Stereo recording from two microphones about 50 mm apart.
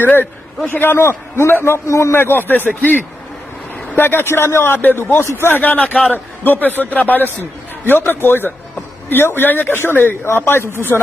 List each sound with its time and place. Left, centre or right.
0.0 s speech: left
1.0 s a man's voice: left
1.6 s a man's voice: left
2.1 s speech: left
3.9 s a man's voice: left
5.5 s a man's voice: left
10.2 s speech: left